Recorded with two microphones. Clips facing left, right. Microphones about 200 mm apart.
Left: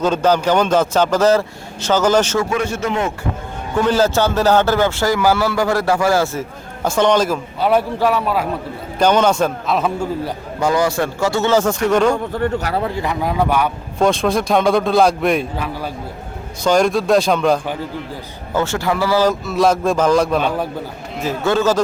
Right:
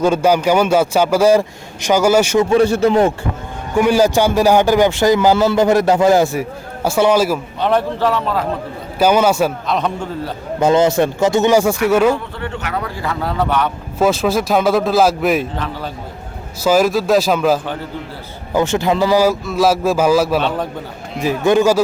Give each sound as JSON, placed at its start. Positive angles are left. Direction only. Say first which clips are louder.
{"t": 0.0, "sound": "a man's voice", "louder": "right 2 dB", "side_deg": -10}
{"t": 2.5, "sound": "a man's voice", "louder": "right 8 dB", "side_deg": -35}
{"t": 3.8, "sound": "a man's voice", "louder": "right 3 dB", "side_deg": -10}
{"t": 7.6, "sound": "a man's voice", "louder": "left 1 dB", "side_deg": 10}
{"t": 9.0, "sound": "a man's voice", "louder": "right 1 dB", "side_deg": -5}
{"t": 9.7, "sound": "a man's voice", "louder": "left 1 dB", "side_deg": 5}
{"t": 10.6, "sound": "speech", "louder": "right 4 dB", "side_deg": -20}
{"t": 12.1, "sound": "speech", "louder": "left 5 dB", "side_deg": 45}
{"t": 14.0, "sound": "a man's voice", "louder": "right 1 dB", "side_deg": -5}
{"t": 15.5, "sound": "a man's voice", "louder": "even", "side_deg": 10}
{"t": 16.6, "sound": "a man's voice", "louder": "right 1 dB", "side_deg": -5}
{"t": 18.5, "sound": "a man's voice", "louder": "right 3 dB", "side_deg": -20}
{"t": 21.2, "sound": "a man's voice", "louder": "right 4 dB", "side_deg": -15}